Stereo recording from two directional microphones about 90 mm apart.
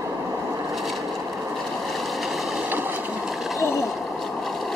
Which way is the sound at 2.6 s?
20° right (ahead or behind).